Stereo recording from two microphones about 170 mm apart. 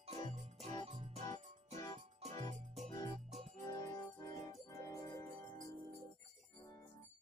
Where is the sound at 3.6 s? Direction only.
20° left (ahead or behind).